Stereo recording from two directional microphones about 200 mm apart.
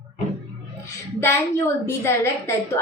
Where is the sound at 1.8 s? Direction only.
15° left (ahead or behind).